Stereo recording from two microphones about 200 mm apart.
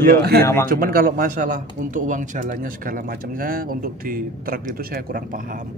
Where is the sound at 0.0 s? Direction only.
50° right (ahead or behind).